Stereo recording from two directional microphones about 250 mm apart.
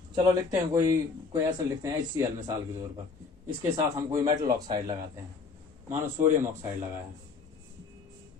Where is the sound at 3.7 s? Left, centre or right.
Centre.